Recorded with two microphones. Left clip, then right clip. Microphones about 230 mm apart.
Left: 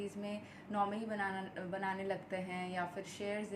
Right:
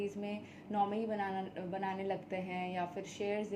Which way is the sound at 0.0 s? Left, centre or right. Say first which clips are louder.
Right 3 dB; centre.